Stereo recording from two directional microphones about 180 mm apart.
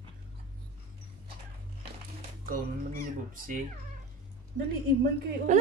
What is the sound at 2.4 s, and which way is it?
Speech, 50° right (ahead or behind).